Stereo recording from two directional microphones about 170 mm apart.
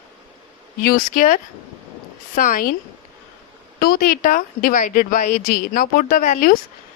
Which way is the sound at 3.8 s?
55° left (ahead or behind).